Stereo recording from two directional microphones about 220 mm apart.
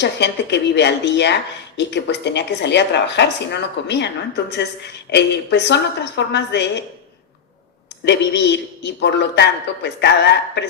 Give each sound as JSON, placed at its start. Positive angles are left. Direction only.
{"t": 0.0, "sound": "a woman's voice", "side_deg": 50}
{"t": 5.1, "sound": "a woman's voice", "side_deg": 50}
{"t": 8.0, "sound": "a woman's voice", "side_deg": 50}